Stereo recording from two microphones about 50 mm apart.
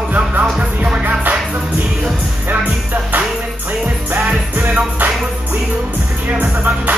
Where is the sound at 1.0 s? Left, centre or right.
Right.